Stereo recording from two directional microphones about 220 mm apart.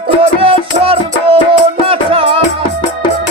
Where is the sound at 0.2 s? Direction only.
25° right (ahead or behind).